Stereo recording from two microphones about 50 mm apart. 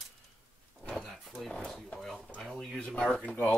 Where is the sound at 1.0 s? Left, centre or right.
Centre.